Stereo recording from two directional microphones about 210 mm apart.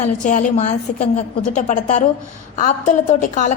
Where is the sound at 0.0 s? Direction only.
35° left (ahead or behind).